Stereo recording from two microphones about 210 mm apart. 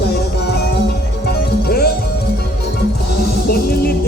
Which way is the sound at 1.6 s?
45° left (ahead or behind).